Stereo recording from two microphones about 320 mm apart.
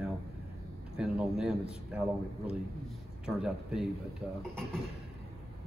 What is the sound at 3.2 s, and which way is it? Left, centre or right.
Speech, centre.